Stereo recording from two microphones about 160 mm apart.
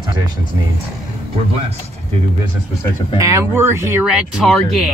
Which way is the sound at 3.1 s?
20° right (ahead or behind).